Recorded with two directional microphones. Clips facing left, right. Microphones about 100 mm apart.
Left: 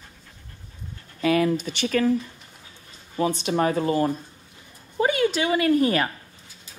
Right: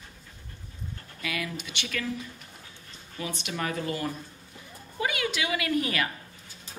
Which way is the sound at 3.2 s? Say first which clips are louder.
Left 11 dB; 35° left (ahead or behind).